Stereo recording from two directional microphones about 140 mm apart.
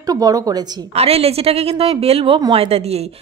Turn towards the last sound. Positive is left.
turn(degrees=-50)  # may be behind; listen again after turning